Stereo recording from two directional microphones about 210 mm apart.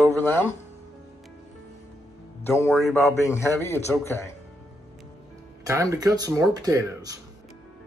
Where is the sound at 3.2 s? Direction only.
15° left (ahead or behind).